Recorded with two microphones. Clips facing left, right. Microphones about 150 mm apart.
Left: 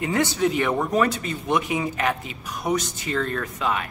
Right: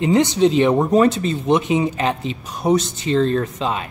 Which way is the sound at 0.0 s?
20° right (ahead or behind).